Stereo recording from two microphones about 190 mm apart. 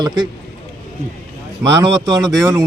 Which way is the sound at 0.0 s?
20° right (ahead or behind).